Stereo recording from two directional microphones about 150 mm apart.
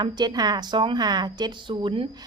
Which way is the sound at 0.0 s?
30° right (ahead or behind).